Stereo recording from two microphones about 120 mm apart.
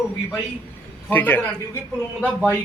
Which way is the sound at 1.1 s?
15° left (ahead or behind).